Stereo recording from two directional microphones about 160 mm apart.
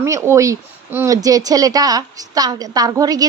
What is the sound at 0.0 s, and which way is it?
Speech, 20° right (ahead or behind).